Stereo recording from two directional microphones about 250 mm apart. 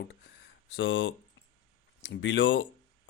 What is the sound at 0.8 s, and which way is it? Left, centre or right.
Speech, left.